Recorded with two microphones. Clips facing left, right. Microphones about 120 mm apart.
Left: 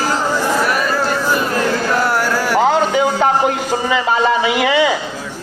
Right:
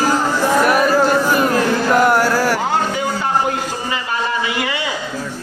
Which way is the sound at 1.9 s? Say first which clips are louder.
Right 3 dB; 15° right (ahead or behind).